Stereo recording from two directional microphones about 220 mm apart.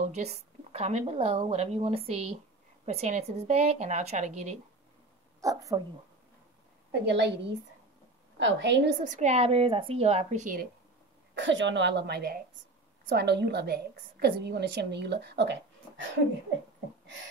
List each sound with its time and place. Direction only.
0.1 s speech: 30° right (ahead or behind)
5.4 s speech: 15° right (ahead or behind)
7.1 s a woman's voice: 50° right (ahead or behind)
8.4 s a woman's voice: 55° right (ahead or behind)
9.0 s speech: 35° right (ahead or behind)
11.3 s a woman's voice: 55° right (ahead or behind)